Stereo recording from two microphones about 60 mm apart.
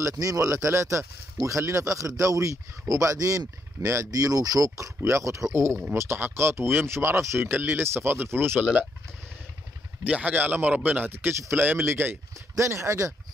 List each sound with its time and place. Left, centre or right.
0.0 s speech: right
5.9 s speech: right
10.0 s a man's voice: right
12.5 s speech: right